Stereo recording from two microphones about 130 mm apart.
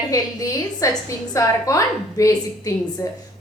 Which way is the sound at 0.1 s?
25° left (ahead or behind).